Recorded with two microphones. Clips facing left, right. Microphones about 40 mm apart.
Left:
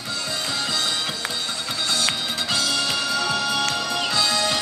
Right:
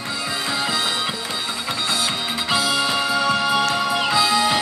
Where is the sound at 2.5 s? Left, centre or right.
Centre.